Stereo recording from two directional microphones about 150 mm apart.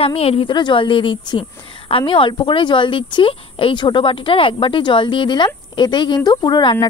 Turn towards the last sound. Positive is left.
turn(degrees=30)  # may be behind; listen again after turning